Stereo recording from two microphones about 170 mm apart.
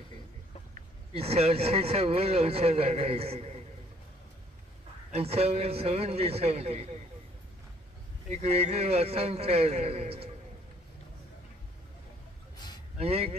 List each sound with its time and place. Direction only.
1.1 s speech: 35° right (ahead or behind)
5.1 s speech: 35° right (ahead or behind)
8.3 s speech: 40° right (ahead or behind)
13.0 s speech: 35° right (ahead or behind)